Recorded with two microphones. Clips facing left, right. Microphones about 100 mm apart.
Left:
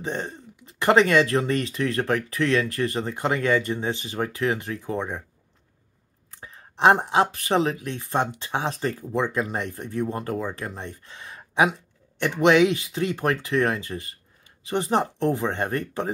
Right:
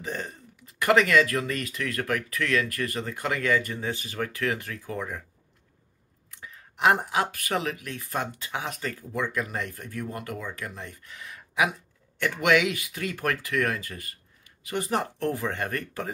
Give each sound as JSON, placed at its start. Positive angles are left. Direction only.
{"t": 0.0, "sound": "speech", "side_deg": 25}
{"t": 6.3, "sound": "speech", "side_deg": 35}